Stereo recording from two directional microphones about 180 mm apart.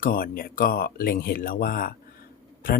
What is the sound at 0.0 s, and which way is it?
Speech, 55° left (ahead or behind).